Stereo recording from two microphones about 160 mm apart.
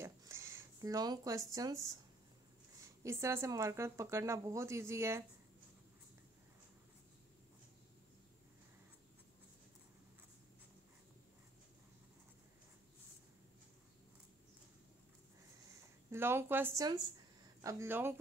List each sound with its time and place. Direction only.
0.0 s a sound: 15° right (ahead or behind)
2.8 s speech: 20° right (ahead or behind)
16.1 s speech: 15° right (ahead or behind)